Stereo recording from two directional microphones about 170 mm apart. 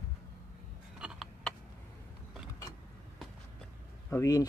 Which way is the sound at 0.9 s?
Centre (ahead or behind).